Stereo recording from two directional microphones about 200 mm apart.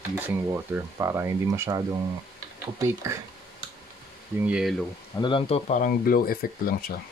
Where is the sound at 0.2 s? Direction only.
15° right (ahead or behind).